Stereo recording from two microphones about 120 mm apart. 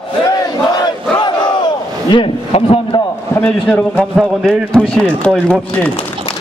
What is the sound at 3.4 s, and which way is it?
A man's voice, 10° left (ahead or behind).